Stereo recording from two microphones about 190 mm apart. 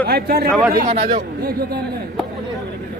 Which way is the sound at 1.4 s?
55° right (ahead or behind).